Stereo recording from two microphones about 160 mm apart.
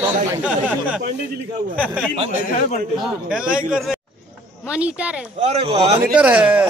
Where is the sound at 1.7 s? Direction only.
5° right (ahead or behind).